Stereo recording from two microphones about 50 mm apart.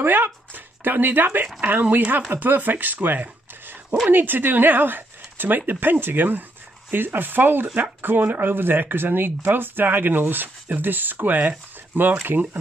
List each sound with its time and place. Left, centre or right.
0.0 s speech: right